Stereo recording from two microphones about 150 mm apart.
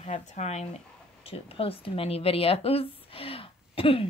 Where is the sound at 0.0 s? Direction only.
50° left (ahead or behind).